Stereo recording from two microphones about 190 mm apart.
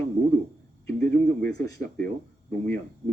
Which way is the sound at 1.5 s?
15° left (ahead or behind).